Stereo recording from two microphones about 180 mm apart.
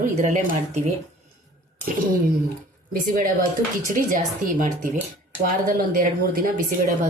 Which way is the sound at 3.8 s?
45° right (ahead or behind).